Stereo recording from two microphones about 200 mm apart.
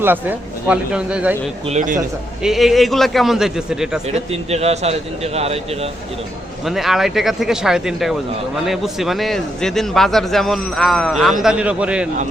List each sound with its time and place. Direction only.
0.0 s speech: 10° right (ahead or behind)
1.6 s speech: 35° right (ahead or behind)
2.4 s a man's voice: centre (ahead or behind)
4.3 s speech: 30° right (ahead or behind)
6.7 s a man's voice: centre (ahead or behind)